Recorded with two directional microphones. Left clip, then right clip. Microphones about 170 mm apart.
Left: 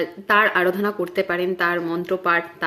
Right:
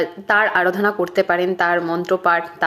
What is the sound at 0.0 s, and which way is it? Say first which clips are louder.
Speech: right 1 dB; 15° left (ahead or behind).